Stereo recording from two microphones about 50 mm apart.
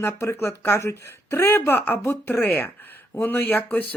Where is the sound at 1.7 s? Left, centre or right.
Left.